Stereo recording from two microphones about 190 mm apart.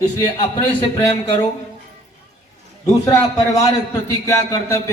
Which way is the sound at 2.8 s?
15° left (ahead or behind).